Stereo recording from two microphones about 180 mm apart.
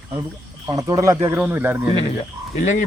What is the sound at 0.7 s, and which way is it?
Speech, 20° right (ahead or behind).